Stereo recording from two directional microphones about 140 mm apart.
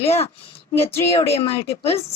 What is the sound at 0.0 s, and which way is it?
Speech, 45° left (ahead or behind).